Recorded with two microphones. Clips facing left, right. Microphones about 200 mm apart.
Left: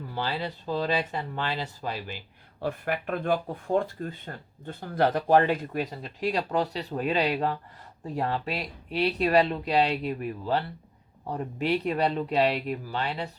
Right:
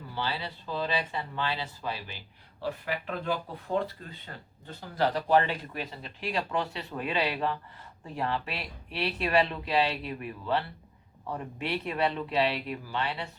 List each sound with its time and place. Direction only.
0.1 s speech: 45° left (ahead or behind)